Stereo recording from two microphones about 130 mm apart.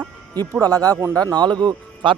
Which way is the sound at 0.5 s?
30° right (ahead or behind).